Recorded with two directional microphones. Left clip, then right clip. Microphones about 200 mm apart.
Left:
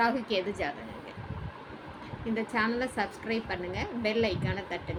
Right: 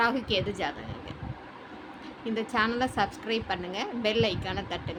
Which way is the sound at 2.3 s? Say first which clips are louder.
Right 2 dB; 15° right (ahead or behind).